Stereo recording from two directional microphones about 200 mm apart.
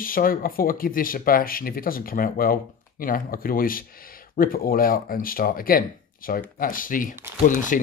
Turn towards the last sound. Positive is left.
turn(degrees=40)  # may be behind; listen again after turning